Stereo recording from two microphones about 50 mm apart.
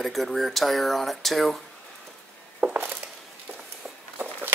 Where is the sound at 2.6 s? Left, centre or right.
Right.